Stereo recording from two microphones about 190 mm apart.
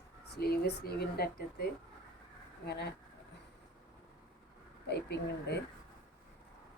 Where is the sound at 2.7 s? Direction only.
60° left (ahead or behind).